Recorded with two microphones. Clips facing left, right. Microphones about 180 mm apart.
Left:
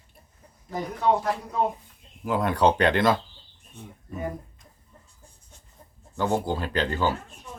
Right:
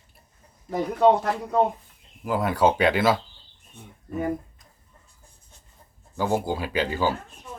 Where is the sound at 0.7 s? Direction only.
65° right (ahead or behind).